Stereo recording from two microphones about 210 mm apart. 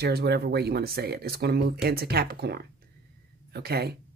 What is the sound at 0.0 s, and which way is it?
Speech, 50° right (ahead or behind).